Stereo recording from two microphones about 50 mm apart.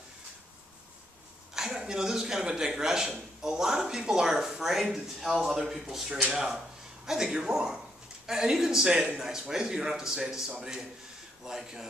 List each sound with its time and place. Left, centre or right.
1.5 s a man's voice: centre